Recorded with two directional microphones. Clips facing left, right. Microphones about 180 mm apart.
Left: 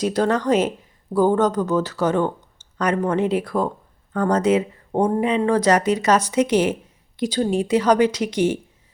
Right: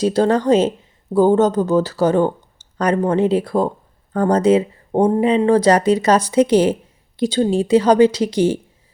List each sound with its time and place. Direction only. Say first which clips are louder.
0.0 s speech: right 4 dB; 30° right (ahead or behind)